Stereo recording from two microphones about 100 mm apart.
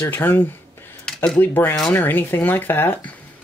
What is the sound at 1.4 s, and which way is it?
Speech, 20° left (ahead or behind).